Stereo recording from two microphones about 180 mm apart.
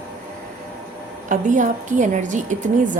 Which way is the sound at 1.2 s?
45° right (ahead or behind).